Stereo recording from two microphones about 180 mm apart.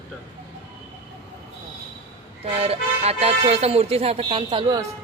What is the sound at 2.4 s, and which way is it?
Speech, 35° right (ahead or behind).